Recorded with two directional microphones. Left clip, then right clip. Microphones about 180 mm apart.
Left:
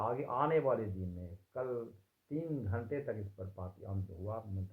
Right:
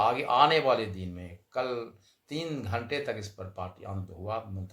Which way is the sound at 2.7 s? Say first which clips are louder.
Right 10 dB; 25° right (ahead or behind).